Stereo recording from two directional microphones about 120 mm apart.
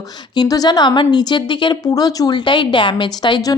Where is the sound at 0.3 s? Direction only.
30° left (ahead or behind).